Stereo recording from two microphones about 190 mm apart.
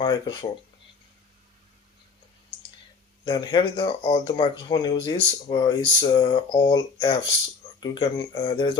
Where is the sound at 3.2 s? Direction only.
20° left (ahead or behind).